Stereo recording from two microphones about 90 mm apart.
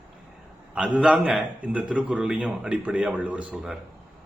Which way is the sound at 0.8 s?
10° right (ahead or behind).